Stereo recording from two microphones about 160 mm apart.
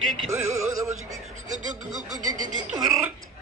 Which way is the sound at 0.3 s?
15° right (ahead or behind).